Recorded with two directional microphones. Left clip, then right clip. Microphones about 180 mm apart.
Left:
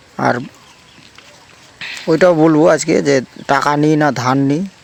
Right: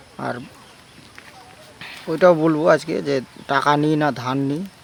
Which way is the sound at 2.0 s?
35° left (ahead or behind).